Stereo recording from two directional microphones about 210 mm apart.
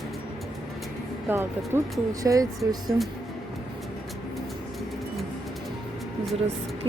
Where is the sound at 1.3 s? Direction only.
10° right (ahead or behind).